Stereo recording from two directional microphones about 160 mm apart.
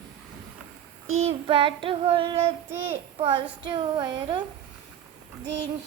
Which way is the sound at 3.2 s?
30° right (ahead or behind).